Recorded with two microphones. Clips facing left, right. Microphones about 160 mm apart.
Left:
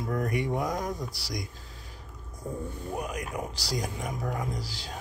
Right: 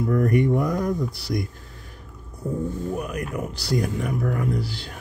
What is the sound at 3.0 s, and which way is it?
Speech, 60° right (ahead or behind).